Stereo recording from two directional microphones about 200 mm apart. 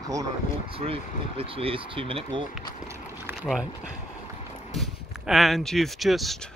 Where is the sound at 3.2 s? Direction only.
Centre (ahead or behind).